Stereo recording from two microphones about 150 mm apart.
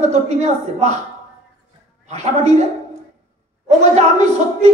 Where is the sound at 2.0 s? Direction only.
50° right (ahead or behind).